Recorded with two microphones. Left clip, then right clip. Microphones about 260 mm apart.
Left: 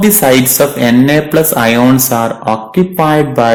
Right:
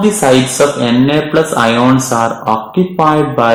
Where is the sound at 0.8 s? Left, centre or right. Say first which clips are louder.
Left 2 dB; left.